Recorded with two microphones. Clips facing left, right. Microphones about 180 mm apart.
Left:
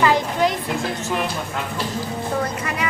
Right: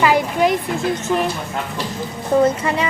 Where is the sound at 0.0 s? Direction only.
15° right (ahead or behind).